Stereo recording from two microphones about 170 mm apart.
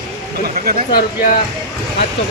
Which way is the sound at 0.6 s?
60° right (ahead or behind).